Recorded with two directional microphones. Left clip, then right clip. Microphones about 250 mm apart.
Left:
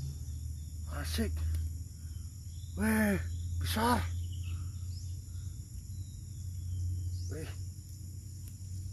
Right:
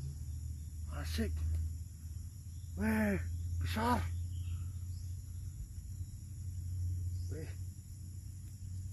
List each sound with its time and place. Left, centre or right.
0.8 s cricket: centre
2.7 s speech: centre
7.2 s hum: centre